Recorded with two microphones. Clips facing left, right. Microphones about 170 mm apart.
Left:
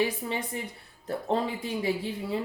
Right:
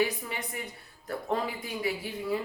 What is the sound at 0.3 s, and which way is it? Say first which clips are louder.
A woman's voice: left 5 dB; 25° left (ahead or behind).